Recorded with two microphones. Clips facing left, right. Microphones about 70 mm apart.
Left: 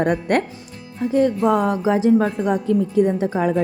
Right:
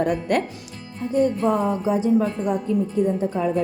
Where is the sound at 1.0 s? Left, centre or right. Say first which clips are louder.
Left 3 dB; left.